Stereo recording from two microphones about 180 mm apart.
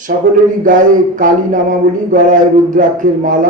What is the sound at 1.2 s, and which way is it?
A man's voice, 45° right (ahead or behind).